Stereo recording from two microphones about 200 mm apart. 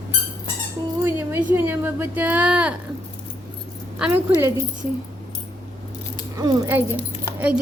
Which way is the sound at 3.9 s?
10° right (ahead or behind).